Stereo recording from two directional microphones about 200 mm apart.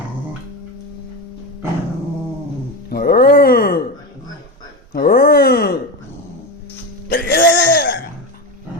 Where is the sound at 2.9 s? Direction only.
50° left (ahead or behind).